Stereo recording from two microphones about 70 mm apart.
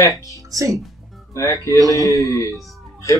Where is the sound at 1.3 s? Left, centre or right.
Left.